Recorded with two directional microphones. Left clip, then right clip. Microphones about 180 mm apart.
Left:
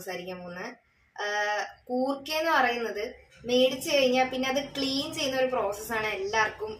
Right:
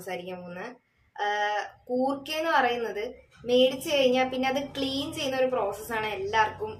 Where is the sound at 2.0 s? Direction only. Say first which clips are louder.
Left 1 dB; 5° right (ahead or behind).